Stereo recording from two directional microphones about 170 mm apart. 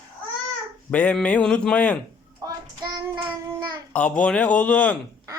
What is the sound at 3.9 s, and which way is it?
Speech, 5° left (ahead or behind).